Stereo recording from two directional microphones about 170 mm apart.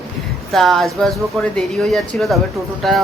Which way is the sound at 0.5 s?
Centre (ahead or behind).